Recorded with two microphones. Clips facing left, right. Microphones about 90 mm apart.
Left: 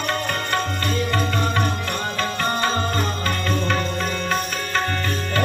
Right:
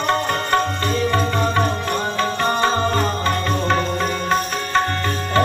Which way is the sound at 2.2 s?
25° right (ahead or behind).